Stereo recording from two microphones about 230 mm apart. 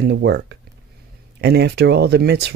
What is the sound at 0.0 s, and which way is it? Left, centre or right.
Speech, right.